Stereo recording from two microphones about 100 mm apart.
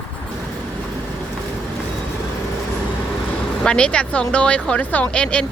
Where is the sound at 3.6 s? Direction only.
10° left (ahead or behind).